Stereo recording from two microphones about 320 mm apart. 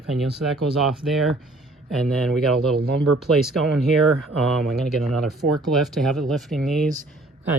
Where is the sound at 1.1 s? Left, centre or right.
Centre.